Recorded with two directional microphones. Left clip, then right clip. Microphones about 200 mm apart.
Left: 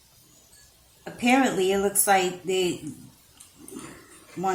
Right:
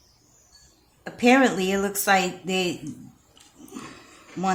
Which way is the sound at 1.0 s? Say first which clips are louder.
Right 4 dB; 30° right (ahead or behind).